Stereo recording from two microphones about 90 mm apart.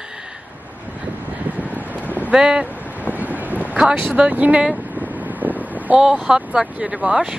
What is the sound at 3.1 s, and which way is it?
Boat, 20° right (ahead or behind).